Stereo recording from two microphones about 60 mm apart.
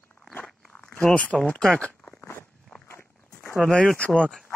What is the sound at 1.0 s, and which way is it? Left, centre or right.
Speech, left.